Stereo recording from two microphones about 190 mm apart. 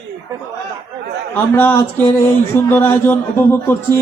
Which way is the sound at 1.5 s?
10° left (ahead or behind).